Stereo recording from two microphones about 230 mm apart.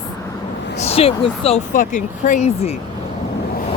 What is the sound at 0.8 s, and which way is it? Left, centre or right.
Speech, left.